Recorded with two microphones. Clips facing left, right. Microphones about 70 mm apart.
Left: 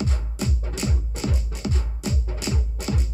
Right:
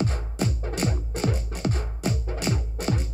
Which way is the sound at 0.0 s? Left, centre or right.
Right.